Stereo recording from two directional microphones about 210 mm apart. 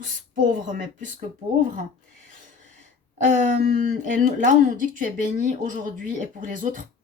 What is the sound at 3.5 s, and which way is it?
A woman's voice, 40° right (ahead or behind).